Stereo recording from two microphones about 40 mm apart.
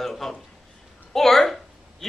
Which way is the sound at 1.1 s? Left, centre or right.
Centre.